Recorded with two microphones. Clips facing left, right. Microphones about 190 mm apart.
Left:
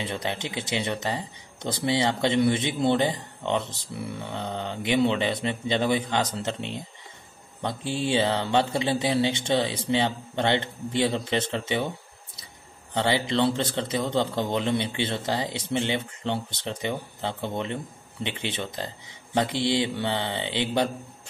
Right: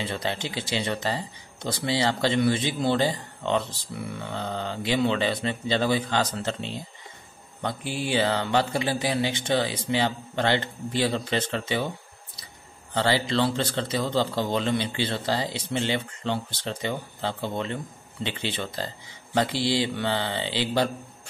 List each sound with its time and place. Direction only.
0.0 s speech: 15° left (ahead or behind)
12.9 s speech: 20° left (ahead or behind)